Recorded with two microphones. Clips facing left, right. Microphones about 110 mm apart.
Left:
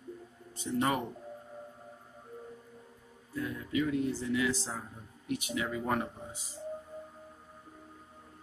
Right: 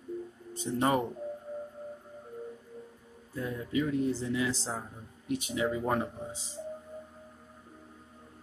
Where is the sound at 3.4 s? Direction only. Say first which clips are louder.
Right 1 dB; 30° right (ahead or behind).